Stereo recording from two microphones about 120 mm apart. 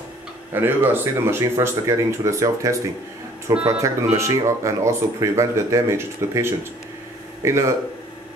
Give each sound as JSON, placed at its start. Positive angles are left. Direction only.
{"t": 0.5, "sound": "speech", "side_deg": -15}